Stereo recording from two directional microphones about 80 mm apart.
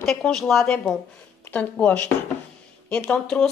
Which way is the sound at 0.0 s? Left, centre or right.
Centre.